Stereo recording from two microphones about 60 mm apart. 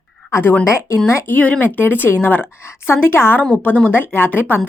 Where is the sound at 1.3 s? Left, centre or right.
Left.